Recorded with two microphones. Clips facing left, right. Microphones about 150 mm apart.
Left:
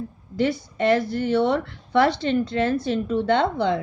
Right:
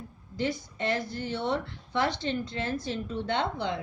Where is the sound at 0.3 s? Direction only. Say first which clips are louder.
Left 8 dB; 65° left (ahead or behind).